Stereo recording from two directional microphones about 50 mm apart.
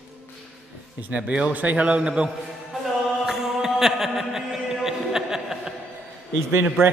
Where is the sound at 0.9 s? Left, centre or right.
Right.